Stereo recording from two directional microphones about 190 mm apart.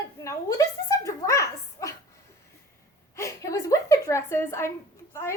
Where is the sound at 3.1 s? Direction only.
15° left (ahead or behind).